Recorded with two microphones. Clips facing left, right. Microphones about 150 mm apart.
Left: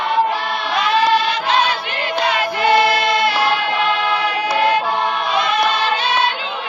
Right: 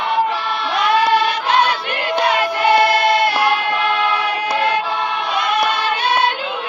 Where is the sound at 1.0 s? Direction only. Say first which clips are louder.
Even; 55° right (ahead or behind).